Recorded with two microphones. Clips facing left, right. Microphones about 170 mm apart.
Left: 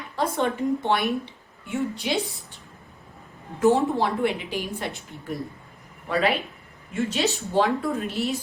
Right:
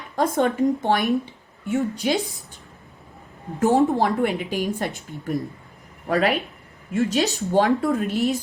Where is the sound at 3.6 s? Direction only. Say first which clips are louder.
Right 2 dB; 45° right (ahead or behind).